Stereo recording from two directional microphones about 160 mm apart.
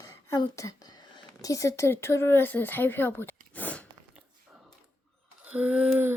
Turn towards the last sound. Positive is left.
turn(degrees=-10)  # may be behind; listen again after turning